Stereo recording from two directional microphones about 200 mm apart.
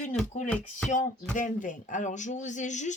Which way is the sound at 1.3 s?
40° left (ahead or behind).